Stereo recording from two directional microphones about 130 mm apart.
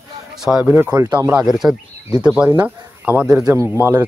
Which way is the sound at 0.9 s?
30° right (ahead or behind).